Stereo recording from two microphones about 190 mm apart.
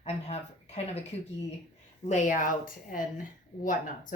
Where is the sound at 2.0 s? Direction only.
40° left (ahead or behind).